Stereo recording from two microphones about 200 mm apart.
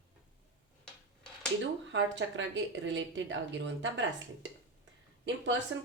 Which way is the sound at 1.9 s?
70° right (ahead or behind).